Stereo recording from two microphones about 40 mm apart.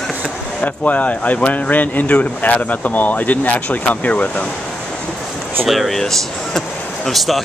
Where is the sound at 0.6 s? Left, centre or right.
Left.